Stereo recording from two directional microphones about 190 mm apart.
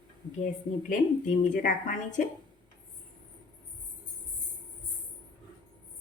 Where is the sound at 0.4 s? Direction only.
45° left (ahead or behind).